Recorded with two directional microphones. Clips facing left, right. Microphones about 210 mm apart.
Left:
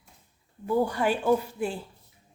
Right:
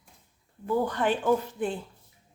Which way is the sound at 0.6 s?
10° left (ahead or behind).